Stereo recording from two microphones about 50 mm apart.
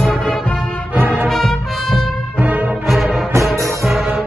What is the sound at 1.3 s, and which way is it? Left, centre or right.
Brass instrument, centre.